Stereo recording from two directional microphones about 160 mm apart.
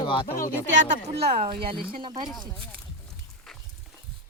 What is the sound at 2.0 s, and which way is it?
Speech, 30° right (ahead or behind).